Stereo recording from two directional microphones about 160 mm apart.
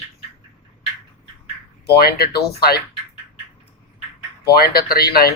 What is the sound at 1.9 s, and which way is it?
Speech, 80° left.